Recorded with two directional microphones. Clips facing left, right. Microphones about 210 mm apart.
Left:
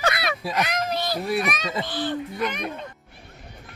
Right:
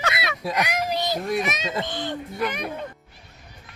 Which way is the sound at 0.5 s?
10° right (ahead or behind).